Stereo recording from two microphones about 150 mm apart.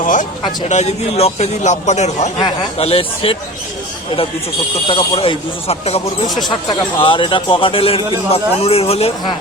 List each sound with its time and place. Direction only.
0.0 s a sound: 60° left (ahead or behind)
0.7 s speech: 45° left (ahead or behind)
4.9 s speech: 35° left (ahead or behind)
6.2 s speech: centre (ahead or behind)
6.7 s speech: 35° left (ahead or behind)